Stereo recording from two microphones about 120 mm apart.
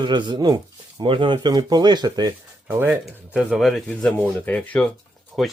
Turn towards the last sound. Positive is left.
turn(degrees=0)  # may be behind; listen again after turning